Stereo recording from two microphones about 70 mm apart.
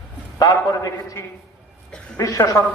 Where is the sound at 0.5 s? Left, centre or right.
Left.